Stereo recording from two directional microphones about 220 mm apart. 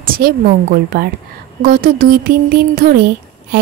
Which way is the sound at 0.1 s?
40° right (ahead or behind).